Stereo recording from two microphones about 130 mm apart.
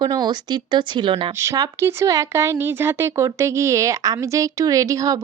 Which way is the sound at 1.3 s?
20° right (ahead or behind).